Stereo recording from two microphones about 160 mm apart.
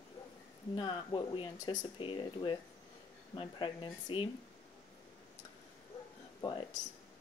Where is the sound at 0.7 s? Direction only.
30° left (ahead or behind).